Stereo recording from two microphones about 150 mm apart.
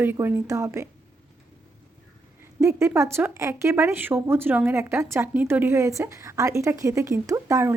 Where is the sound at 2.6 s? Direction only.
20° right (ahead or behind).